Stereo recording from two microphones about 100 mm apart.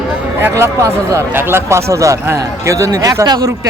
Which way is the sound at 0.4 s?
30° right (ahead or behind).